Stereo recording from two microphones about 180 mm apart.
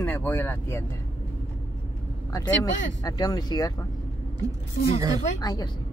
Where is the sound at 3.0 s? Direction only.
20° left (ahead or behind).